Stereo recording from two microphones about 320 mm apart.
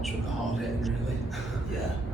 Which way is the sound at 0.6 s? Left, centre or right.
Centre.